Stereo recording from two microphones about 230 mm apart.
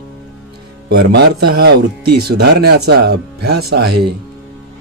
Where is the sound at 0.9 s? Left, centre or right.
Right.